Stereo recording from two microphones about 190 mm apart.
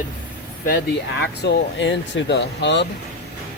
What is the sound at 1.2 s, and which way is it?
Speech, 65° left (ahead or behind).